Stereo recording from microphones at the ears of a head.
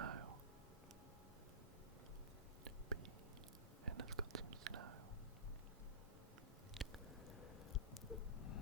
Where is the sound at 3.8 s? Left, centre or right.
Right.